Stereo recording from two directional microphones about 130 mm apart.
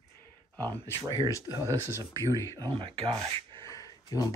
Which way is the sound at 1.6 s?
25° right (ahead or behind).